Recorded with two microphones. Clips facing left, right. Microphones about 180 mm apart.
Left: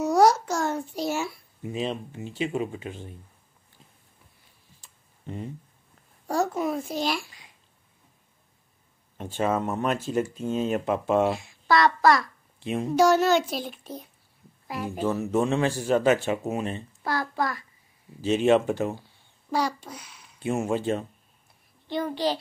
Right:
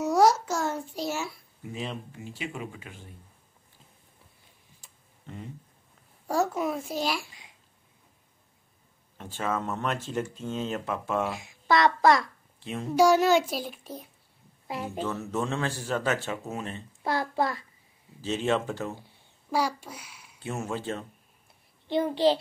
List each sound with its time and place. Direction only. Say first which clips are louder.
0.0 s a sound: left 2 dB; centre (ahead or behind)
1.6 s speech: left 6 dB; 20° left (ahead or behind)
5.2 s a sound: left 6 dB; 20° left (ahead or behind)
6.2 s a child's voice: left 1 dB; 5° right (ahead or behind)
9.2 s speech: left 5 dB; 20° left (ahead or behind)
11.3 s a child's voice: left 2 dB; 20° right (ahead or behind)
12.6 s speech: left 6 dB; 15° left (ahead or behind)
12.9 s a child's voice: even; 10° right (ahead or behind)
15.1 s speech: left 6 dB; 15° left (ahead or behind)
17.0 s a child's voice: right 1 dB; 25° right (ahead or behind)
18.2 s speech: left 7 dB; 15° left (ahead or behind)
19.5 s a child's voice: left 1 dB; 5° right (ahead or behind)
20.3 s speech: left 7 dB; 15° left (ahead or behind)
22.1 s a child's voice: right 5 dB; 25° right (ahead or behind)